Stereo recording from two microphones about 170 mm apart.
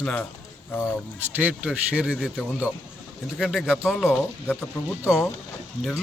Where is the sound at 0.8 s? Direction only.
10° right (ahead or behind).